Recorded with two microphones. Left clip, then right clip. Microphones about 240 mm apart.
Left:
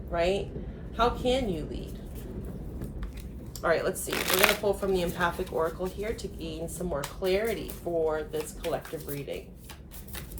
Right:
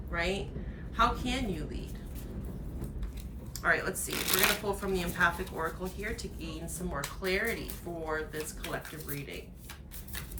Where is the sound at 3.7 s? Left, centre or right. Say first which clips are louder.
Left 4 dB; centre.